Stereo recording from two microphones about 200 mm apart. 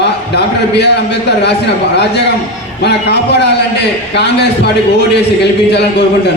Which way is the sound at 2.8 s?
55° left (ahead or behind).